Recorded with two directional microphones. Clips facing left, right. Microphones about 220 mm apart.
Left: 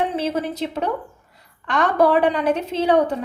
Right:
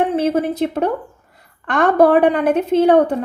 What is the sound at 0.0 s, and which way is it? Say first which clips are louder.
A woman's voice: right 6 dB; 55° right (ahead or behind).